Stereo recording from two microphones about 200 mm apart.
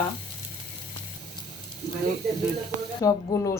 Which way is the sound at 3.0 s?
15° left (ahead or behind).